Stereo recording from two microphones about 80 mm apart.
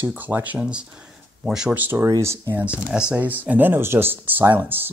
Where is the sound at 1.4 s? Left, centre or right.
Centre.